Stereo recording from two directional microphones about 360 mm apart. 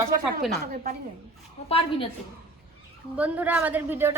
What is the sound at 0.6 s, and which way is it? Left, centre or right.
Speech, right.